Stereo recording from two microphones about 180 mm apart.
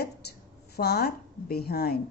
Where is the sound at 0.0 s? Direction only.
65° left (ahead or behind).